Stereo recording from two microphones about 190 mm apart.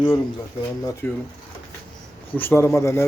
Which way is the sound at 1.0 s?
10° left (ahead or behind).